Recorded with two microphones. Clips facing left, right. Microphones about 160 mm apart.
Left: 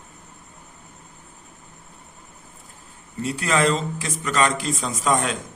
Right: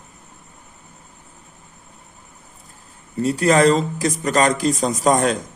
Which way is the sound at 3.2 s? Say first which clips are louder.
Right 6 dB; 40° right (ahead or behind).